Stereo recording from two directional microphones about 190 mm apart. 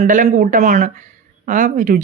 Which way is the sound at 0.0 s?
40° right (ahead or behind).